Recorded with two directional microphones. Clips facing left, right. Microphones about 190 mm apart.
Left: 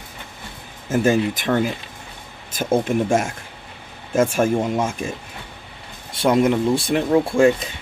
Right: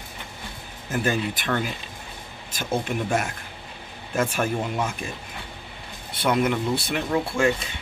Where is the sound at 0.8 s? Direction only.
25° left (ahead or behind).